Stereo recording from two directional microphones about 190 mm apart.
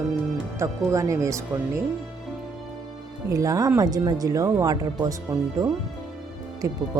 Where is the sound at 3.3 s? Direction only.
15° right (ahead or behind).